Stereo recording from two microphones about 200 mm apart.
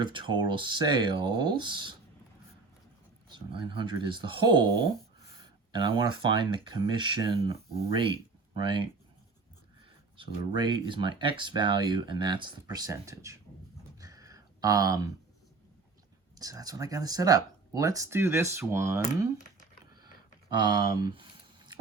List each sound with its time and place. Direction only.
0.0 s speech: 25° right (ahead or behind)
3.2 s speech: 25° right (ahead or behind)
10.2 s speech: 25° right (ahead or behind)
14.0 s a sound: 15° right (ahead or behind)
16.3 s speech: 20° right (ahead or behind)
20.6 s speech: 20° right (ahead or behind)